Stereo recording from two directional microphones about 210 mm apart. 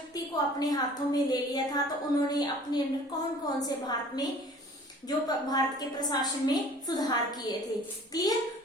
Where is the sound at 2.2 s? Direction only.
20° left (ahead or behind).